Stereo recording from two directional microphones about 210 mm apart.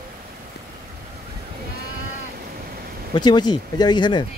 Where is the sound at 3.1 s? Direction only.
20° left (ahead or behind).